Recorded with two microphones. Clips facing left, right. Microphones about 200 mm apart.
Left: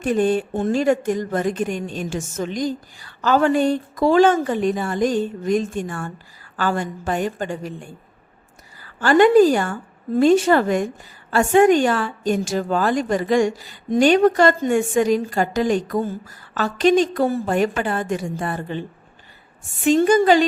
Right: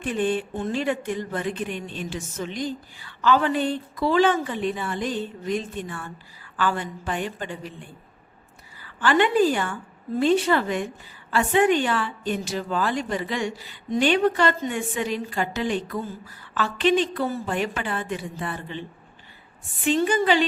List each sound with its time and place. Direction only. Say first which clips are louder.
0.0 s a woman's voice: left 6 dB; 45° left (ahead or behind)